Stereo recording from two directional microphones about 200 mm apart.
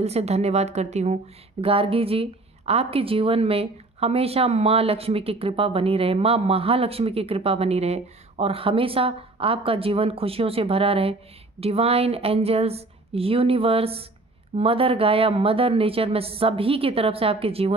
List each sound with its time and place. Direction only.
0.0 s a woman's voice: 30° right (ahead or behind)